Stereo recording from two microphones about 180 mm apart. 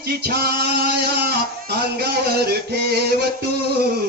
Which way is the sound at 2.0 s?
65° right (ahead or behind).